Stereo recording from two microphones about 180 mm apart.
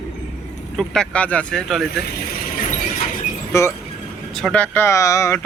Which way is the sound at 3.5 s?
15° left (ahead or behind).